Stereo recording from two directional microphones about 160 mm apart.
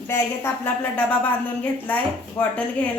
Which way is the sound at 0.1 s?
15° left (ahead or behind).